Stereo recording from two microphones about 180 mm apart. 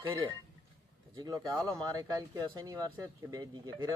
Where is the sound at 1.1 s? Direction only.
20° right (ahead or behind).